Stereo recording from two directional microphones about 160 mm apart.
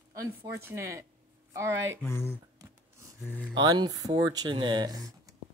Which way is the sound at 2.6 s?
20° right (ahead or behind).